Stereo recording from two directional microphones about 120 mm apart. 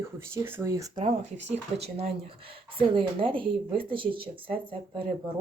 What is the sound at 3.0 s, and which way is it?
Speech, 45° right (ahead or behind).